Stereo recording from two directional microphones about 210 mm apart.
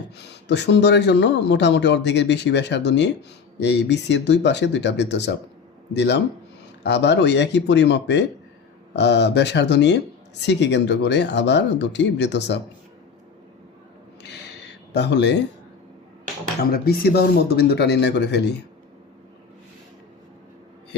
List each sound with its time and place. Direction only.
0.2 s a man's voice: 55° left (ahead or behind)
14.9 s a man's voice: 55° left (ahead or behind)
16.6 s speech: 45° left (ahead or behind)